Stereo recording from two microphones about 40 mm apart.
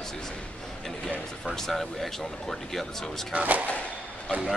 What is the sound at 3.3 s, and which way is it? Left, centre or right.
Speech, right.